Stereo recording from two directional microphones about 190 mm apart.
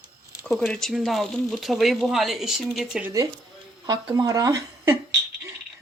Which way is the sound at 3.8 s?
20° right (ahead or behind).